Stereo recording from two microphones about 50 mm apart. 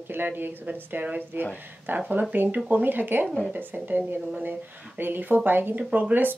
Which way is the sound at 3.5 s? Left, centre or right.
Right.